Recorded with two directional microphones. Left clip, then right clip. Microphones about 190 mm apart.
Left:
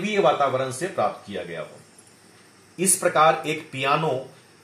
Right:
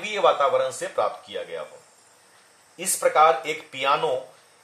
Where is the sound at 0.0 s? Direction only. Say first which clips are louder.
Even; 30° right (ahead or behind).